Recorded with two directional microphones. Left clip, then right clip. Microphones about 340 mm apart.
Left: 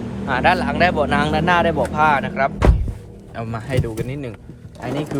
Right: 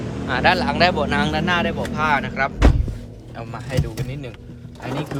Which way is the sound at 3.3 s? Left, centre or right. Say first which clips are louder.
Left 3 dB; centre.